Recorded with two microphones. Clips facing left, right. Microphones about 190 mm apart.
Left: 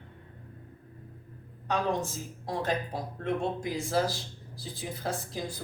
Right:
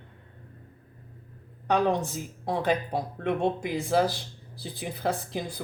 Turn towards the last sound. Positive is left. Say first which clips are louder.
# right 2 dB
turn(degrees=-60)  # may be behind; listen again after turning